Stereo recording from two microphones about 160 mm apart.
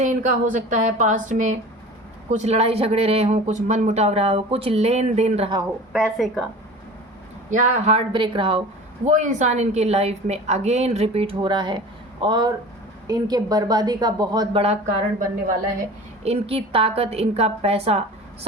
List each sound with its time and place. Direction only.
0.0 s a woman's voice: 50° right (ahead or behind)
5.9 s speech: centre (ahead or behind)
7.5 s speech: 40° right (ahead or behind)
9.0 s a woman's voice: 50° right (ahead or behind); by 14.6 s 25° right (ahead or behind)
14.6 s a woman's voice: 45° right (ahead or behind)
16.2 s speech: 40° right (ahead or behind)